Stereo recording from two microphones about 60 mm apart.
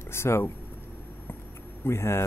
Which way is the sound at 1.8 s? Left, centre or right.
Left.